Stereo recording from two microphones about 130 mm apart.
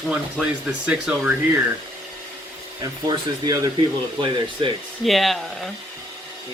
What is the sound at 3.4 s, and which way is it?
Speech, 30° right (ahead or behind).